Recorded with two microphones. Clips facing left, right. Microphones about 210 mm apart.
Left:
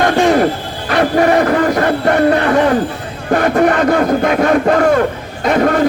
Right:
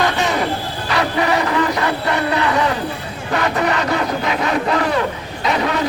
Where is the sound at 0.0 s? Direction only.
50° left (ahead or behind).